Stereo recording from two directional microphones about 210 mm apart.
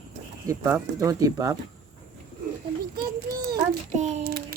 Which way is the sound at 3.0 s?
45° right (ahead or behind).